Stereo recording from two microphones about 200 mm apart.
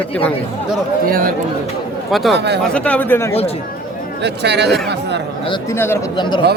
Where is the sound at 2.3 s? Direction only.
60° right (ahead or behind).